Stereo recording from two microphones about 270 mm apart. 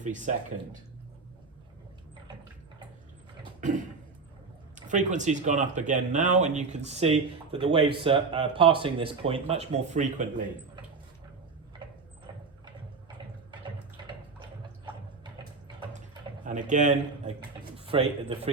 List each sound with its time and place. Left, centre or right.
0.0 s speech: right
4.9 s speech: right
15.2 s a sound: centre
16.5 s speech: right